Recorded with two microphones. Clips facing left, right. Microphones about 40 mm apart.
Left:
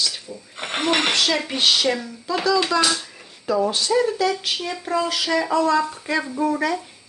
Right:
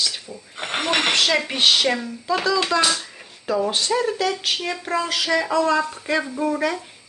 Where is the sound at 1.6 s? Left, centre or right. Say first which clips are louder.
Even; right.